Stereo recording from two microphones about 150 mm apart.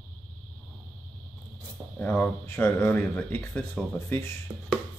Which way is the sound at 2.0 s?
10° left (ahead or behind).